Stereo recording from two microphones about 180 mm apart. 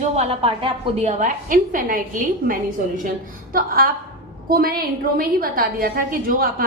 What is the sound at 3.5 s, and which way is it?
A woman's voice, 55° right (ahead or behind).